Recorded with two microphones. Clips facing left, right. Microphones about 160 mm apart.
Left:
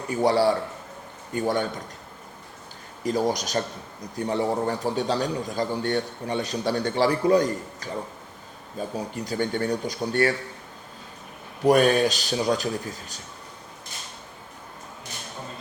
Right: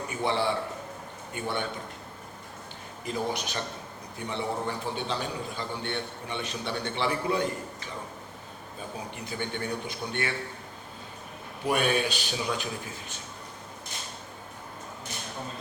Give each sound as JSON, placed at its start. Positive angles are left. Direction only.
{"t": 0.1, "sound": "a man's voice", "side_deg": 40}
{"t": 3.0, "sound": "a man's voice", "side_deg": 40}
{"t": 11.6, "sound": "a man's voice", "side_deg": 40}